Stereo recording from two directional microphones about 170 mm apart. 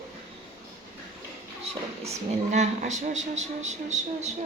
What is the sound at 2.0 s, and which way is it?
Speech, 45° right (ahead or behind).